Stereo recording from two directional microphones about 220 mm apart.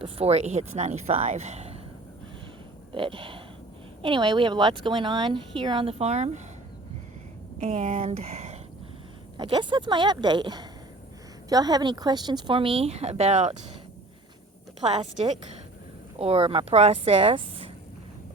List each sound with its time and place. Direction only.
0.0 s speech: 30° right (ahead or behind)
2.9 s speech: 25° right (ahead or behind)
7.6 s speech: 30° right (ahead or behind)
14.8 s speech: 30° right (ahead or behind)